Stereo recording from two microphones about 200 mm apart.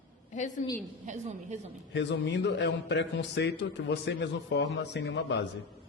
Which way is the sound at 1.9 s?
60° left (ahead or behind).